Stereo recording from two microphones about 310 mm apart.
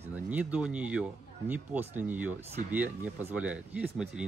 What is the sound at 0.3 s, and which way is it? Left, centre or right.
A man's voice, centre.